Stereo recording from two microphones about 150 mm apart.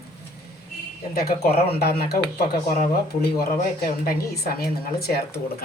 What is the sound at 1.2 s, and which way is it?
Speech, 90° left.